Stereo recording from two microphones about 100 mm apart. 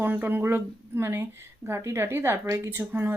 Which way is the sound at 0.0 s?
20° right (ahead or behind).